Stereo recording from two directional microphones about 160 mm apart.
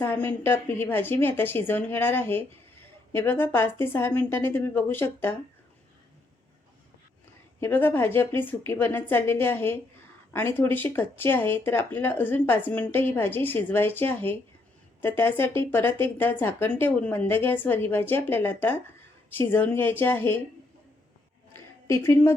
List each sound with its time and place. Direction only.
0.0 s speech: 15° left (ahead or behind)
7.6 s speech: 10° left (ahead or behind)
21.5 s a sound: 15° left (ahead or behind)